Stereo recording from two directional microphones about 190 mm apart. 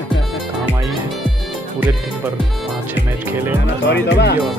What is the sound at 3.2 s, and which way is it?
Speech, 10° right (ahead or behind).